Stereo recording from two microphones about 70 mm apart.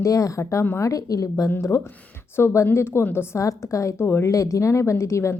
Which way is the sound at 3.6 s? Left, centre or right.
Left.